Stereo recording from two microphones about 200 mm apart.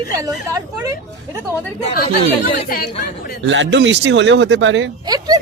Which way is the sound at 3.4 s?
70° right (ahead or behind).